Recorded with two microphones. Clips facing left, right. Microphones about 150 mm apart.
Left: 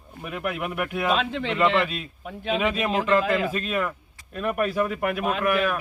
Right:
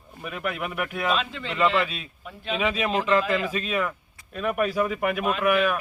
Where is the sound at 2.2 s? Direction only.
55° left (ahead or behind).